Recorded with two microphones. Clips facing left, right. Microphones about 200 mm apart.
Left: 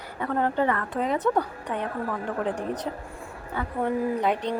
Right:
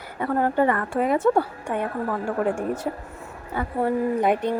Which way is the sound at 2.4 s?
45° right (ahead or behind).